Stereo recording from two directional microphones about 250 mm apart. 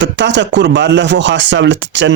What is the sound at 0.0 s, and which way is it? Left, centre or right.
Speech, right.